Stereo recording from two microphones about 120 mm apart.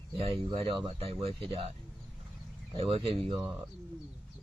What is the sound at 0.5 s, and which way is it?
Speech, 50° right (ahead or behind).